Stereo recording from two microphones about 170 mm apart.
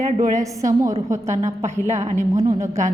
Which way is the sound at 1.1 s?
15° right (ahead or behind).